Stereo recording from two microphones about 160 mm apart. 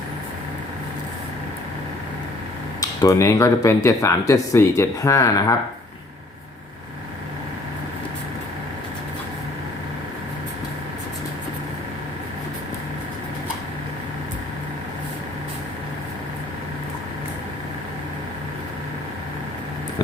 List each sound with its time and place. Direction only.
2.8 s speech: 20° left (ahead or behind)